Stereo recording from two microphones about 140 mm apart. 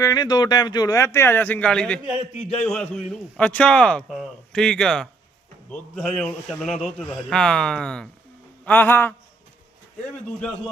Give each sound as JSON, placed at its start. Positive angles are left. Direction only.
{"t": 0.0, "sound": "a man's voice", "side_deg": 25}